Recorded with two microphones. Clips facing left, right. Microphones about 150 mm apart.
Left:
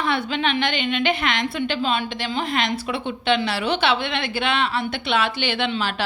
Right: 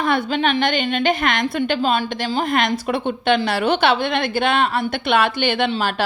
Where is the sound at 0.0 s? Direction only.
45° right (ahead or behind).